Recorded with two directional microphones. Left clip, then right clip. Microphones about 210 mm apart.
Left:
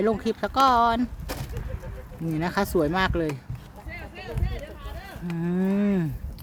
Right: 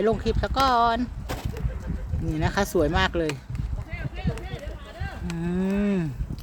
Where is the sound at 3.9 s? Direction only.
45° left (ahead or behind).